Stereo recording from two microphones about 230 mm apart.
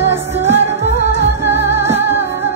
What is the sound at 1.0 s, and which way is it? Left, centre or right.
Music, left.